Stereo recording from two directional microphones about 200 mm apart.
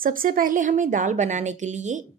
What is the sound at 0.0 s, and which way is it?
Speech, 45° right (ahead or behind).